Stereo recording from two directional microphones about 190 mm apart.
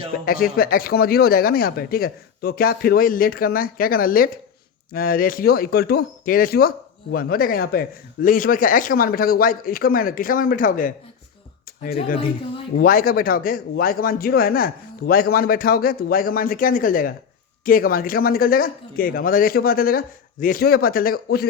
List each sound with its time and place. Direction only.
0.3 s speech: 50° left (ahead or behind)